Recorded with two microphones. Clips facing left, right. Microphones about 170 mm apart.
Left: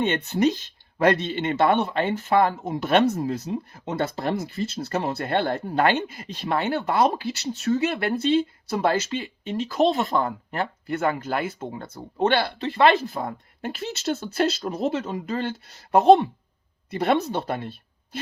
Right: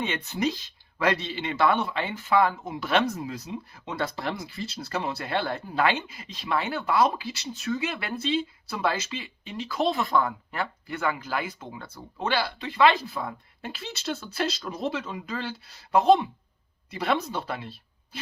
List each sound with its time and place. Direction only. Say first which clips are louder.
0.0 s speech: left 6 dB; 45° left (ahead or behind)
5.6 s speech: left 4 dB; 40° left (ahead or behind)
12.2 s speech: left 6 dB; 55° left (ahead or behind)
17.5 s a sound: left 5 dB; 55° left (ahead or behind)